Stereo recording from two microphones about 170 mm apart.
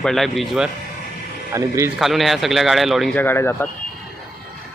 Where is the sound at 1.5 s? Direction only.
15° right (ahead or behind).